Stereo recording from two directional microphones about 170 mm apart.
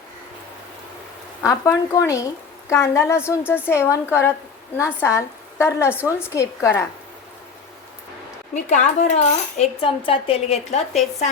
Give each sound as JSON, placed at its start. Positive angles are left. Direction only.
{"t": 1.5, "sound": "a woman's voice", "side_deg": 20}
{"t": 8.5, "sound": "speech", "side_deg": 45}